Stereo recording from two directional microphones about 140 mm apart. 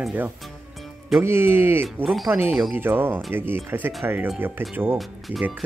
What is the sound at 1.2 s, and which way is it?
Speech, 15° right (ahead or behind).